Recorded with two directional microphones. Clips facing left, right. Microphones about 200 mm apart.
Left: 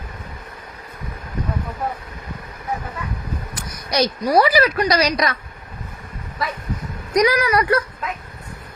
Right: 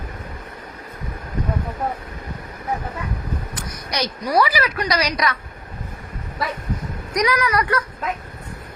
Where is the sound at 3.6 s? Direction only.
30° left (ahead or behind).